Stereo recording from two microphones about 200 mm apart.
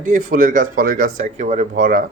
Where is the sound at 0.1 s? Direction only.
40° right (ahead or behind).